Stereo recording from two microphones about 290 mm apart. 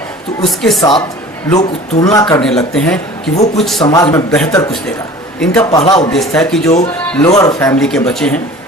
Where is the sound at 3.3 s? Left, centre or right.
Left.